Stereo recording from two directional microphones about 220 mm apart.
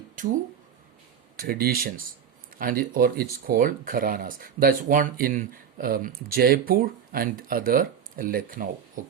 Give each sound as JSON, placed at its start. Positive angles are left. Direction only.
{"t": 1.4, "sound": "speech", "side_deg": -40}